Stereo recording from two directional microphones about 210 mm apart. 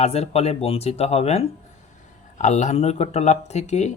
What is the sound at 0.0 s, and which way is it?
Speech, 30° left (ahead or behind).